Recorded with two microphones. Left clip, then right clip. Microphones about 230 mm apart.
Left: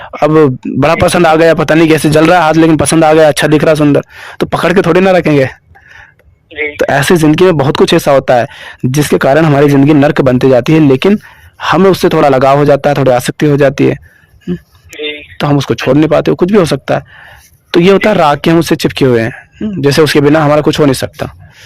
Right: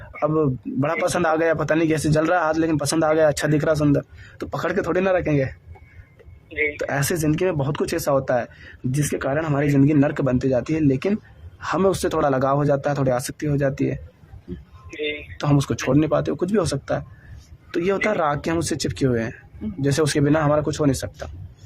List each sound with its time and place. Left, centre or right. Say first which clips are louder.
0.1 s a man's voice: left 14 dB; left
6.5 s speech: left 7 dB; centre
6.7 s a man's voice: left 16 dB; left
14.9 s a sound: left 8 dB; centre
15.4 s a man's voice: left 12 dB; left